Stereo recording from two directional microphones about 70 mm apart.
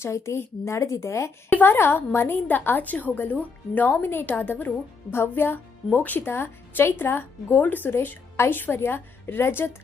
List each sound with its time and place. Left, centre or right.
0.0 s speech: left
1.5 s a woman's voice: left